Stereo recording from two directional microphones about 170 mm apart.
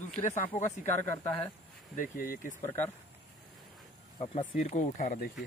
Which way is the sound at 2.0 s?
50° left (ahead or behind).